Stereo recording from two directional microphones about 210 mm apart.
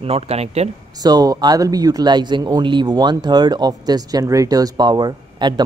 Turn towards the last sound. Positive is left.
turn(degrees=-20)  # may be behind; listen again after turning